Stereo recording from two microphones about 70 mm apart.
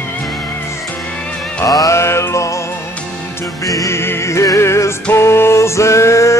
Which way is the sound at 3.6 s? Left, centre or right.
Left.